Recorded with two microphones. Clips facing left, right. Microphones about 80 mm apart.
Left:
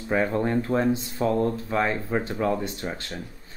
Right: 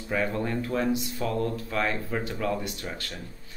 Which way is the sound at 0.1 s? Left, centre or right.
Left.